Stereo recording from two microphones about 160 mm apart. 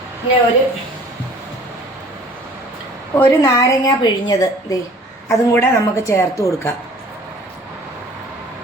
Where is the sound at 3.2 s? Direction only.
20° left (ahead or behind).